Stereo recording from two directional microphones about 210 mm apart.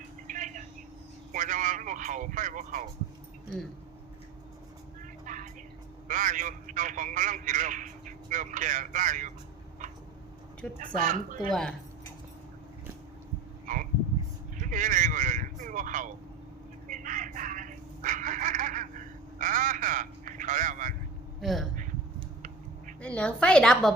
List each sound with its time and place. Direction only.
0.3 s telephone: 40° right (ahead or behind)
1.3 s a man's voice: 40° right (ahead or behind)
5.2 s vehicle: 40° right (ahead or behind)
6.1 s a man's voice: 40° right (ahead or behind)
10.8 s a man's voice: 35° right (ahead or behind)
13.7 s frog: 40° right (ahead or behind)
14.6 s a man's voice: 40° right (ahead or behind)
16.9 s a sound: 40° right (ahead or behind)
21.4 s a woman's voice: centre (ahead or behind)
23.0 s a woman's voice: 5° left (ahead or behind)